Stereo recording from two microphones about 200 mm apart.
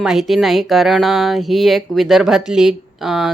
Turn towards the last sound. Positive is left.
turn(degrees=0)  # may be behind; listen again after turning